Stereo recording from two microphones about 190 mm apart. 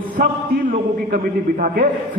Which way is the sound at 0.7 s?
50° right (ahead or behind).